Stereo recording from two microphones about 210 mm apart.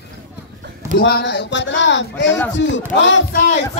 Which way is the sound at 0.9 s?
50° left (ahead or behind).